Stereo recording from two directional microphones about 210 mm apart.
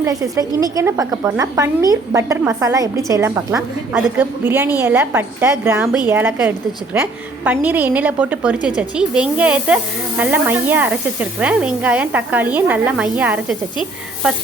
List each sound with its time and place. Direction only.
0.0 s speech: 15° right (ahead or behind)